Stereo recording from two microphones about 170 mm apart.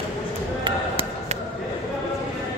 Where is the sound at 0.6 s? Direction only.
35° right (ahead or behind).